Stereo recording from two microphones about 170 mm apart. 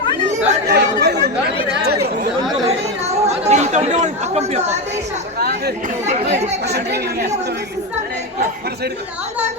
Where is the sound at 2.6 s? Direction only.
40° right (ahead or behind).